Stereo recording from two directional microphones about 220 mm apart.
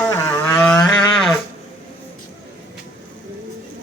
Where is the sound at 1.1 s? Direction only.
Centre (ahead or behind).